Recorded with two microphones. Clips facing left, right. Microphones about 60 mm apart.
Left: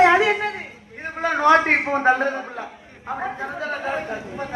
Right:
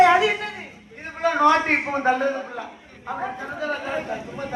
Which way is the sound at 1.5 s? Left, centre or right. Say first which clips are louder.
Left 5 dB; left.